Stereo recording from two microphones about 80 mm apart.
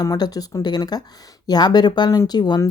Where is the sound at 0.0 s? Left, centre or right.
Left.